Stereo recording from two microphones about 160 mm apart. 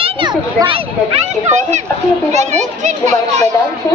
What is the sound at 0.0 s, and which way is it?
A child's voice, 30° right (ahead or behind).